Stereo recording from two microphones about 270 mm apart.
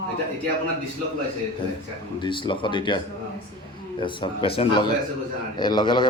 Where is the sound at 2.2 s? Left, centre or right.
Centre.